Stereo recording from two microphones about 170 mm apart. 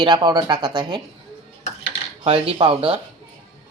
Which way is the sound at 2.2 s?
35° right (ahead or behind).